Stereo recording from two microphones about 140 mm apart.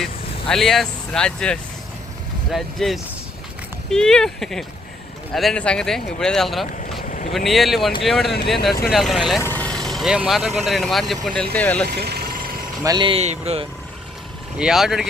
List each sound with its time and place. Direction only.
0.0 s speech: centre (ahead or behind)
7.0 s vehicle: 65° left (ahead or behind)
7.3 s speech: centre (ahead or behind)
9.4 s speech: 15° left (ahead or behind)
12.8 s speech: 30° right (ahead or behind)
13.2 s speech: 50° right (ahead or behind)
14.6 s speech: 5° right (ahead or behind)